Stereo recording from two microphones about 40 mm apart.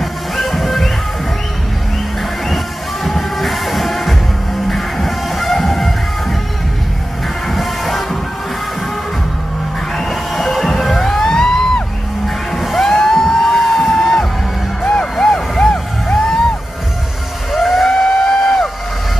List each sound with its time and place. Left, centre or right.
0.0 s music: centre
2.4 s music: centre
7.4 s music: centre
9.9 s music: centre
11.1 s music: centre
17.5 s music: centre
18.2 s a sound: centre